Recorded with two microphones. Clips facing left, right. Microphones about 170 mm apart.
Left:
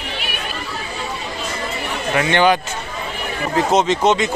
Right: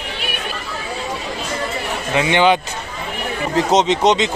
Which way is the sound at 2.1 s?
15° right (ahead or behind).